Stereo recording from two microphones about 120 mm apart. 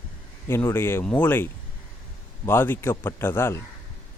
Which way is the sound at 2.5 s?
20° left (ahead or behind).